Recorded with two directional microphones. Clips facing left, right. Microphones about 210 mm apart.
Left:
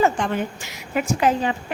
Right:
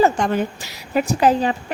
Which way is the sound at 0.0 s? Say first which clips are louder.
Right 3 dB; 35° right (ahead or behind).